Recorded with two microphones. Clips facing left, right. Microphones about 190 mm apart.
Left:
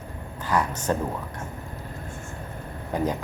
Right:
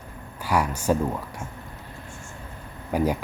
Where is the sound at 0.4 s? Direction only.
10° right (ahead or behind).